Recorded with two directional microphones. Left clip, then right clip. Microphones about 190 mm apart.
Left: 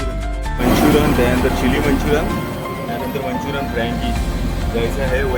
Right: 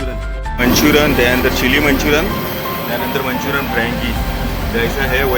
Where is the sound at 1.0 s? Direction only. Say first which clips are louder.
Right 3 dB; 5° right (ahead or behind).